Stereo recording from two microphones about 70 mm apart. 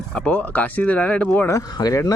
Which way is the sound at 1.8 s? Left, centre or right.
Left.